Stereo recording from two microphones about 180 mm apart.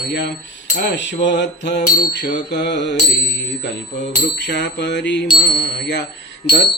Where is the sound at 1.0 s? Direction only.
80° left.